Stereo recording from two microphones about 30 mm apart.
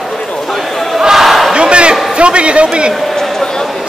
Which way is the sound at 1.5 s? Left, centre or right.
Right.